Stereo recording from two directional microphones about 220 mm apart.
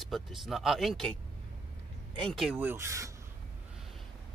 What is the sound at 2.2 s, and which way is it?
Speech, centre (ahead or behind).